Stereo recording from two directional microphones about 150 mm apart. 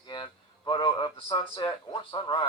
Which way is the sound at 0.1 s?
30° left (ahead or behind).